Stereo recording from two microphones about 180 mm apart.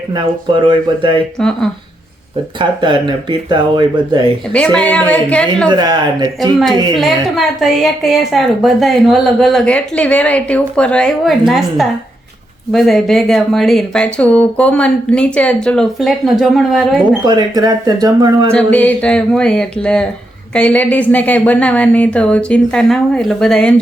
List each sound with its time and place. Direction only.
0.1 s speech: 25° right (ahead or behind)
1.4 s a woman's voice: 5° left (ahead or behind)
2.6 s speech: 25° right (ahead or behind)
4.5 s a woman's voice: 5° left (ahead or behind)
5.6 s speech: 20° right (ahead or behind)
6.9 s a woman's voice: centre (ahead or behind)
17.2 s speech: 20° right (ahead or behind)
18.5 s a woman's voice: 5° left (ahead or behind)